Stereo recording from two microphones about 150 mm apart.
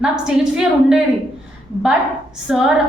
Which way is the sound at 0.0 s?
5° right (ahead or behind).